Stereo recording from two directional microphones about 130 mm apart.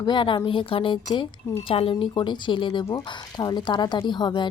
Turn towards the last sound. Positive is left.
turn(degrees=35)  # may be behind; listen again after turning